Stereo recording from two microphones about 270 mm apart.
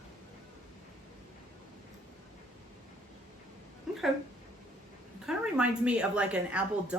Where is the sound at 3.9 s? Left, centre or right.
Centre.